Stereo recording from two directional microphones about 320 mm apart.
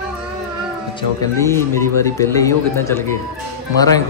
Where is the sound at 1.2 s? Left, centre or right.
Centre.